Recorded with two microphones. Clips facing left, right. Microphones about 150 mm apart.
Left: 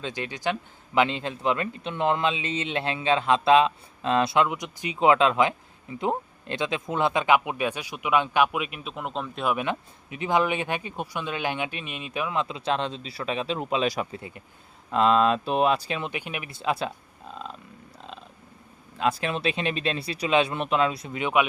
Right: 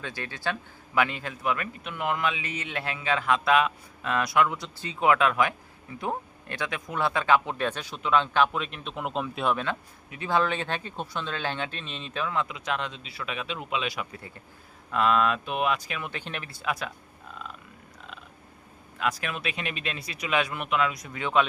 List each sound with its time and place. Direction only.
0.0 s a man's voice: 20° left (ahead or behind); by 9.5 s 5° right (ahead or behind)
9.5 s speech: 15° left (ahead or behind); by 14.1 s 40° left (ahead or behind)
14.1 s a man's voice: 20° left (ahead or behind)
16.1 s speech: 10° left (ahead or behind)
16.5 s a man's voice: 25° left (ahead or behind)
18.9 s a man's voice: 30° left (ahead or behind)